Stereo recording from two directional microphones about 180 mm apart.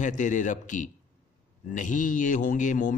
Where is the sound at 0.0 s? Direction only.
45° left (ahead or behind).